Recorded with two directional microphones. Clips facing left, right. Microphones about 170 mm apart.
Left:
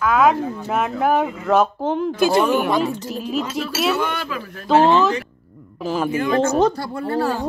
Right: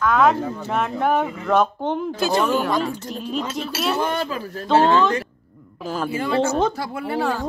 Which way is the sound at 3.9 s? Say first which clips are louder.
Right 1 dB; 30° right (ahead or behind).